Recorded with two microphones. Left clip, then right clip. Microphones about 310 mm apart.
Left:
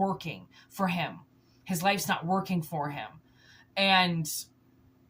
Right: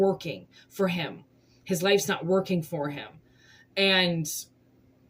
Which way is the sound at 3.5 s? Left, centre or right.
Centre.